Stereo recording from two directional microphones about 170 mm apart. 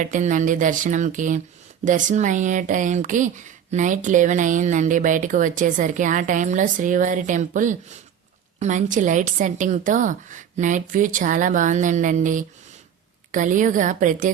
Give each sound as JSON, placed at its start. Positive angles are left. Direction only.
{"t": 0.0, "sound": "speech", "side_deg": -50}